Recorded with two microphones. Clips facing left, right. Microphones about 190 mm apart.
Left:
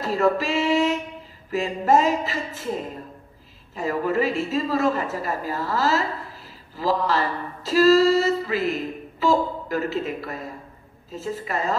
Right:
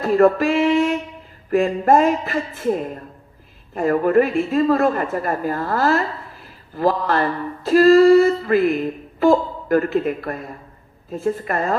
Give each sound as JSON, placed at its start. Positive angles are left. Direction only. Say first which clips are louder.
{"t": 0.0, "sound": "a woman's voice", "louder": "right 7 dB", "side_deg": -55}
{"t": 3.7, "sound": "a woman's voice", "louder": "right 8 dB", "side_deg": -55}